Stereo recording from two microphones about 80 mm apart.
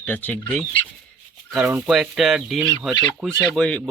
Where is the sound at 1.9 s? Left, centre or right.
Centre.